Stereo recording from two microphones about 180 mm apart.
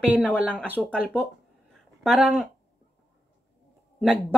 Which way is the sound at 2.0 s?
5° left (ahead or behind).